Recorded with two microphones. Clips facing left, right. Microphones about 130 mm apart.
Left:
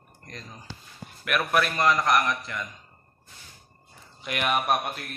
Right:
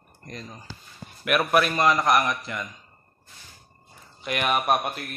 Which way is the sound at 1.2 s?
10° right (ahead or behind).